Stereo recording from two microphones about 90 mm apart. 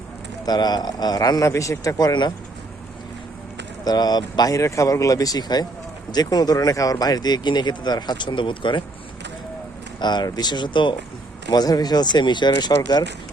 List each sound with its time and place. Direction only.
0.4 s speech: 50° left (ahead or behind)
3.8 s speech: 50° left (ahead or behind); by 8.8 s 65° left (ahead or behind)
10.0 s speech: 55° left (ahead or behind)
11.4 s speech: 50° left (ahead or behind)